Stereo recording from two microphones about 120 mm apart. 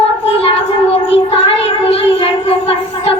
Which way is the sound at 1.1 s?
55° left (ahead or behind).